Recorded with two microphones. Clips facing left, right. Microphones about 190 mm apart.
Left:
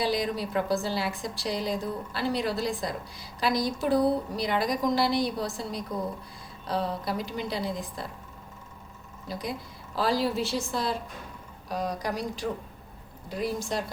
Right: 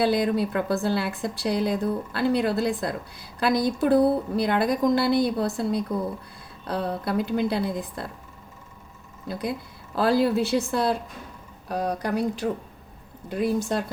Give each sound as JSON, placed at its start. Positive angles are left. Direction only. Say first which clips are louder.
{"t": 0.0, "sound": "a woman's voice", "louder": "right 6 dB", "side_deg": -60}
{"t": 9.3, "sound": "a woman's voice", "louder": "right 4 dB", "side_deg": -60}